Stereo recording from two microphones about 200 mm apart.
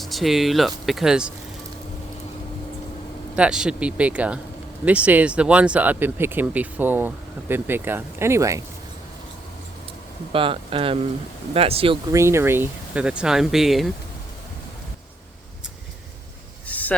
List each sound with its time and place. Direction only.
0.0 s speech: centre (ahead or behind)
3.3 s speech: 5° right (ahead or behind)
10.3 s speech: 25° right (ahead or behind)
12.1 s speech: 15° right (ahead or behind)
16.6 s a sound: 10° left (ahead or behind)